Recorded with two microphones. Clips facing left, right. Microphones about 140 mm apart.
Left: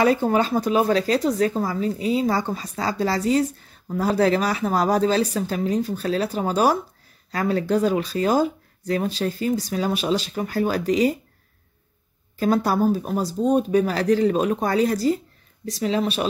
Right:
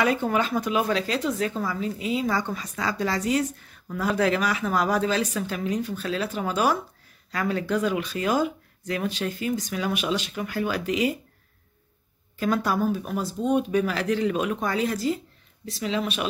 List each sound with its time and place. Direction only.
0.0 s speech: 35° left (ahead or behind)
12.4 s speech: 35° left (ahead or behind)